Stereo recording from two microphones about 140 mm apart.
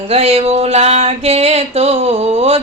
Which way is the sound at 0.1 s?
45° right (ahead or behind).